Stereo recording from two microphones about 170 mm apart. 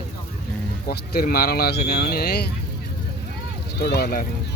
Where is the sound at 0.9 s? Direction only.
60° left (ahead or behind).